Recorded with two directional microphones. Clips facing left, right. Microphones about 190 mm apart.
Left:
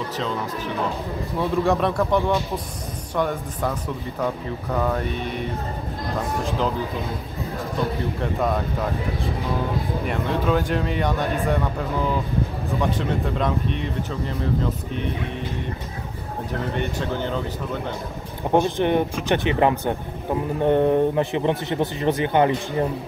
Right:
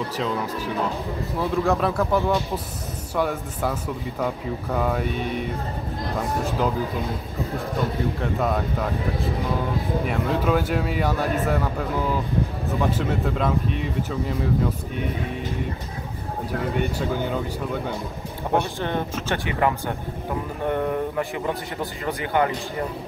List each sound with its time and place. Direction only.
1.4 s speech: centre (ahead or behind)
8.2 s speech: centre (ahead or behind)
10.0 s speech: 5° right (ahead or behind)
12.9 s speech: 5° right (ahead or behind)
16.7 s speech: 10° right (ahead or behind)
18.5 s a man's voice: 20° left (ahead or behind)